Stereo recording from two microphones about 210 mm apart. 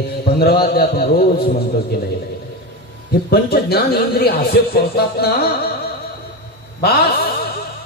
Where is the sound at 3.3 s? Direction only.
50° left (ahead or behind).